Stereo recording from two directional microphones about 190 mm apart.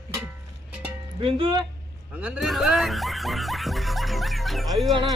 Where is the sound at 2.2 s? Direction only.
5° right (ahead or behind).